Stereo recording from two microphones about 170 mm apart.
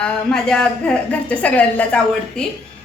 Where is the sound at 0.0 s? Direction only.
5° left (ahead or behind).